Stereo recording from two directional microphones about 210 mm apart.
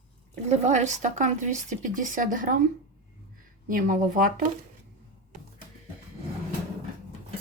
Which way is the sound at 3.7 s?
40° right (ahead or behind).